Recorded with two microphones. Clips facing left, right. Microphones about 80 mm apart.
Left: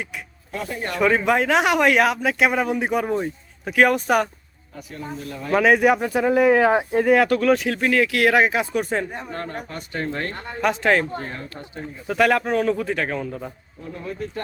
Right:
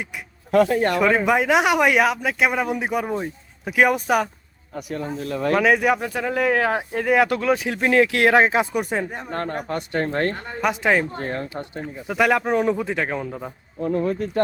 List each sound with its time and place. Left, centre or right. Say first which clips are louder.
0.5 s speech: right 11 dB; right
0.9 s speech: left 3 dB; centre
4.7 s speech: right 7 dB; right
5.0 s speech: right 5 dB; right
5.5 s speech: left 2 dB; centre
7.0 s speech: even; centre
7.3 s speech: left 3 dB; centre
7.8 s speech: right 2 dB; right
8.7 s speech: even; centre
9.3 s speech: right 5 dB; right
10.6 s speech: left 1 dB; centre
11.2 s speech: right 5 dB; right
12.0 s speech: left 1 dB; centre
13.8 s speech: right 9 dB; right